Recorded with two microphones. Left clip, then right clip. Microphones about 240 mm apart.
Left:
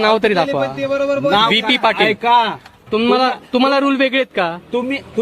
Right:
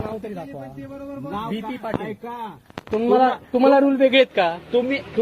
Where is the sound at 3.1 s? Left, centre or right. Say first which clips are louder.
Left 2 dB; left.